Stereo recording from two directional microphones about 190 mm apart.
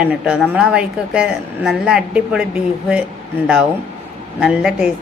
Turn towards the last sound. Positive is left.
turn(degrees=-5)  # may be behind; listen again after turning